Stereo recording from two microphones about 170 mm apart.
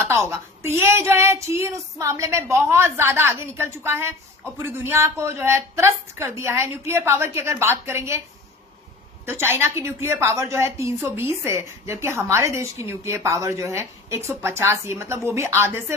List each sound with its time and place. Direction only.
0.0 s a woman's voice: 15° right (ahead or behind)
9.2 s a woman's voice: 15° right (ahead or behind)